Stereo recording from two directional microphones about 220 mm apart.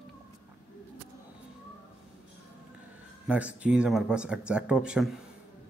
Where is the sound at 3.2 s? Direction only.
5° right (ahead or behind).